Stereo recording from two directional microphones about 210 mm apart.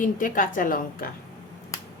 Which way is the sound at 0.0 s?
40° left (ahead or behind).